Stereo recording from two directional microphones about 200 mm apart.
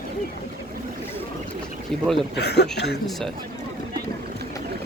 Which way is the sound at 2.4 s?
55° left (ahead or behind).